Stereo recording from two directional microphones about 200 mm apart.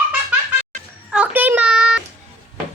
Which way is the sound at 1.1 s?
5° right (ahead or behind).